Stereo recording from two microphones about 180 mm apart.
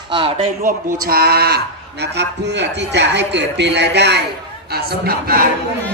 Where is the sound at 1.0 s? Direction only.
60° right (ahead or behind).